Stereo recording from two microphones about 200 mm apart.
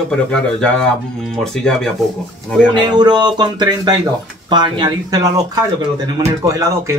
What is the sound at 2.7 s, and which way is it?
Speech, 20° right (ahead or behind).